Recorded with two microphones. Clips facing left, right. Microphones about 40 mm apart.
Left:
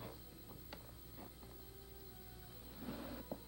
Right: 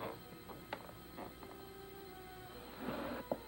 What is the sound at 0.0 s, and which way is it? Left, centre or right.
Music, right.